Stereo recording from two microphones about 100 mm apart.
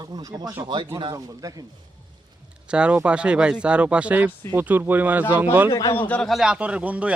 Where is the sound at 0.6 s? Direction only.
50° right (ahead or behind).